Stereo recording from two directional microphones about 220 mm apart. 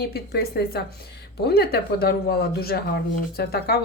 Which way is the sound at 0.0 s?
45° left (ahead or behind).